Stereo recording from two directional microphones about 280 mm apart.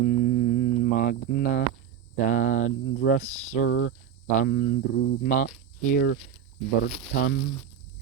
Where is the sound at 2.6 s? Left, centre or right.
Left.